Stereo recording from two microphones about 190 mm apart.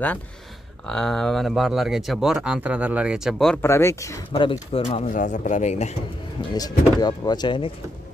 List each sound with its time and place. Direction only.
0.8 s speech: centre (ahead or behind)
3.6 s speech: 15° left (ahead or behind)
4.3 s speech: 25° left (ahead or behind)
6.5 s speech: 20° left (ahead or behind)